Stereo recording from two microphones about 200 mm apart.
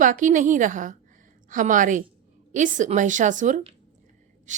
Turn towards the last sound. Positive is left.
turn(degrees=-40)  # may be behind; listen again after turning